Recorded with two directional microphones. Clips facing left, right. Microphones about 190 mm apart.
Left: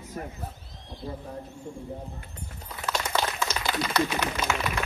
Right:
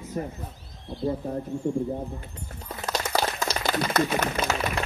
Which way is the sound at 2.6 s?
40° right (ahead or behind).